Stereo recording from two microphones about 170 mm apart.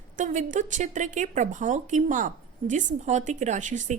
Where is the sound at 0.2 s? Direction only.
50° right (ahead or behind).